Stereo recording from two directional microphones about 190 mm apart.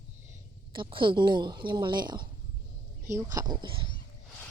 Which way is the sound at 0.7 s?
25° right (ahead or behind).